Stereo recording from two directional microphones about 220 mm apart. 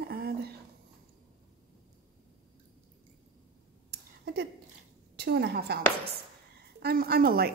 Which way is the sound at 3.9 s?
50° right (ahead or behind).